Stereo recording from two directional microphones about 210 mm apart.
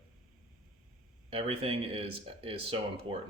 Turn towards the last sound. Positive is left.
turn(degrees=-25)  # may be behind; listen again after turning